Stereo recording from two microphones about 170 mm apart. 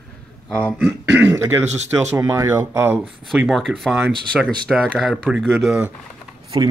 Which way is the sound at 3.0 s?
Centre (ahead or behind).